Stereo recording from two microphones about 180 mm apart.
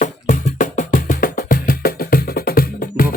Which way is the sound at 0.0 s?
45° left (ahead or behind).